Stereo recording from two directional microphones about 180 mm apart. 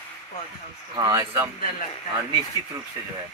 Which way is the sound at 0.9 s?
20° right (ahead or behind).